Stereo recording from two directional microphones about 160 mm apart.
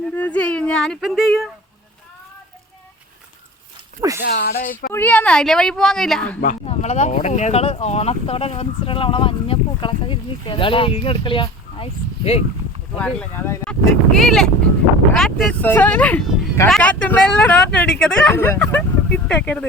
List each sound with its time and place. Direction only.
0.2 s a woman's voice: 10° left (ahead or behind)
4.2 s speech: 80° left; by 4.9 s 65° left (ahead or behind)
4.9 s a woman's voice: 10° left (ahead or behind)
6.7 s speech: 40° left (ahead or behind)
13.0 s speech: 10° left (ahead or behind)
14.1 s a woman's voice: 5° left (ahead or behind)